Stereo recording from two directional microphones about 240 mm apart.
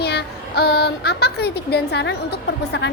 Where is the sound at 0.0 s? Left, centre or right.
Left.